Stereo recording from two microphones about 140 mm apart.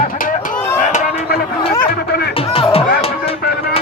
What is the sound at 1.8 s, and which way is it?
Speech, 90° left.